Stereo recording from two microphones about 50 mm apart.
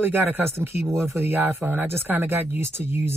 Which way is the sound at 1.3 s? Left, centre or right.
Right.